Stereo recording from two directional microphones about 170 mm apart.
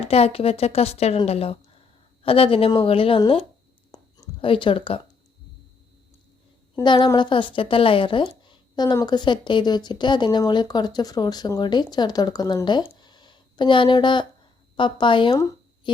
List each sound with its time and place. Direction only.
0.0 s a woman's voice: 35° left (ahead or behind)
3.9 s whispering: 25° left (ahead or behind)
6.8 s a woman's voice: 30° left (ahead or behind)